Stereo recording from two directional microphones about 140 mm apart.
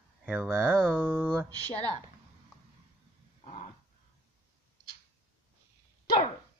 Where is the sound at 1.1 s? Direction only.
10° right (ahead or behind).